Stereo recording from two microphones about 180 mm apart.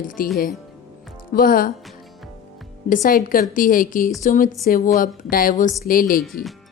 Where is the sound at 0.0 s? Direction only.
50° left (ahead or behind).